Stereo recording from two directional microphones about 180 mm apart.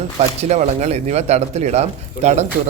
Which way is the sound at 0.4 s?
40° right (ahead or behind).